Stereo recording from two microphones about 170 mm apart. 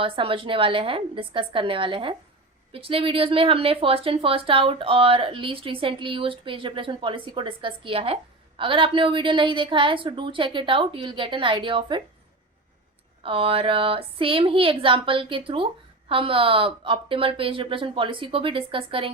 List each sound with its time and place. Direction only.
0.0 s speech: 30° right (ahead or behind)
13.2 s speech: 35° right (ahead or behind)